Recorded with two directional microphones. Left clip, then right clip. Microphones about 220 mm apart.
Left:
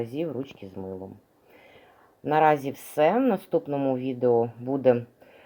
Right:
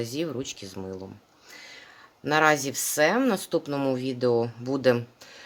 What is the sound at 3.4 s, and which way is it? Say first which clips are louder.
Speech: left 1 dB; 45° right (ahead or behind).